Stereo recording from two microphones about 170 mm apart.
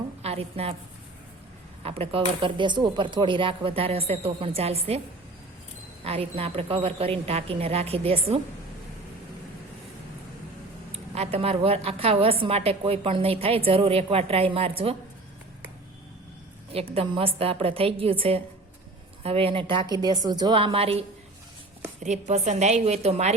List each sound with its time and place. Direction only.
0.2 s a woman's voice: 35° right (ahead or behind)
1.8 s speech: 35° right (ahead or behind)
6.1 s speech: 35° right (ahead or behind)
11.1 s speech: 35° right (ahead or behind)
16.7 s speech: 35° right (ahead or behind)
22.0 s speech: 45° right (ahead or behind)